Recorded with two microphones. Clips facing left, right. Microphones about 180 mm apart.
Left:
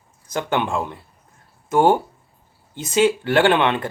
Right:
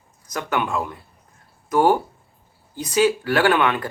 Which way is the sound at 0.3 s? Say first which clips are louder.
Left 2 dB; 30° left (ahead or behind).